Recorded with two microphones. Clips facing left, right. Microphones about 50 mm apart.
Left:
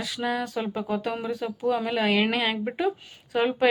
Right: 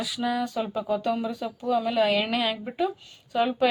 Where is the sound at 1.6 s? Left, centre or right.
Left.